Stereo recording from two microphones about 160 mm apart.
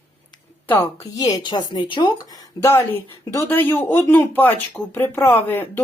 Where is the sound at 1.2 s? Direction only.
25° left (ahead or behind).